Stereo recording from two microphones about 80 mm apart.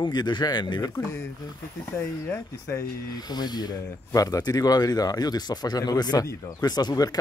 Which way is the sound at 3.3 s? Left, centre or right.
Left.